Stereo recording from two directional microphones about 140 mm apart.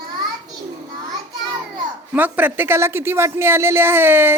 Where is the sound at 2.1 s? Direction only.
10° right (ahead or behind).